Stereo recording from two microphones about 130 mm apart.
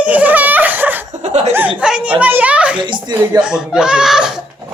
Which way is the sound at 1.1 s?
65° right (ahead or behind).